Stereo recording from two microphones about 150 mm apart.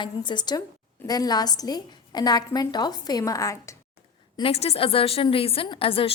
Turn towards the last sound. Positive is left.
turn(degrees=35)  # may be behind; listen again after turning